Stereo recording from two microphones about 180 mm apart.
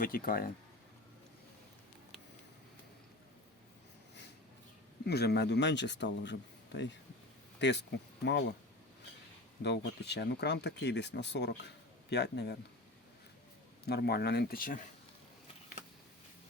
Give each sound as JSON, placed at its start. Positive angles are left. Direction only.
{"t": 0.0, "sound": "speech", "side_deg": 50}
{"t": 5.0, "sound": "speech", "side_deg": 65}
{"t": 7.6, "sound": "speech", "side_deg": 75}
{"t": 9.6, "sound": "speech", "side_deg": 70}
{"t": 13.8, "sound": "speech", "side_deg": 60}